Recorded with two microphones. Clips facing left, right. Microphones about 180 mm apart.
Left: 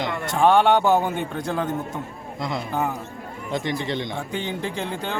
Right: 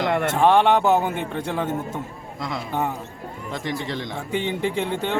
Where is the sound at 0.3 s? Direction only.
5° right (ahead or behind).